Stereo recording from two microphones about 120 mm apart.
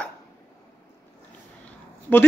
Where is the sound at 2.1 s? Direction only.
10° left (ahead or behind).